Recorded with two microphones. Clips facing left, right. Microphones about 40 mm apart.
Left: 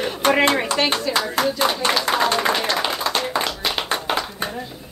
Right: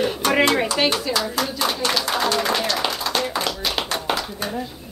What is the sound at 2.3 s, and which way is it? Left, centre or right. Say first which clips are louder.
Speech: left 1 dB; centre.